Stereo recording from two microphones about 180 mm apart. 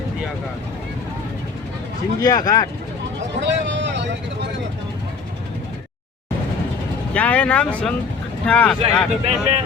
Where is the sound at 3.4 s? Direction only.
80° right.